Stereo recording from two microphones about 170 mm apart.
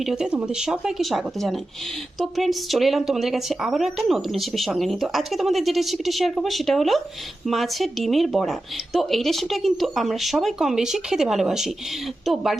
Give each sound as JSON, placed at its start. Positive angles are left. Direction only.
{"t": 0.0, "sound": "speech", "side_deg": -5}